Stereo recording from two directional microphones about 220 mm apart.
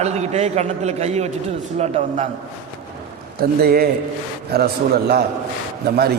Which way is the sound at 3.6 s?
40° right (ahead or behind).